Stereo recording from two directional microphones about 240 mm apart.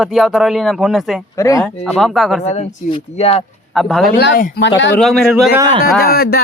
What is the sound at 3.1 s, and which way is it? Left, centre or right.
Speech, left.